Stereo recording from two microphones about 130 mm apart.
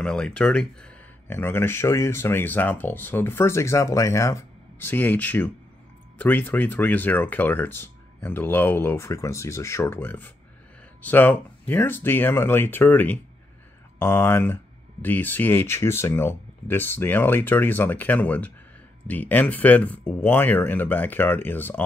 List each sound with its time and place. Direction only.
0.0 s speech: 5° left (ahead or behind)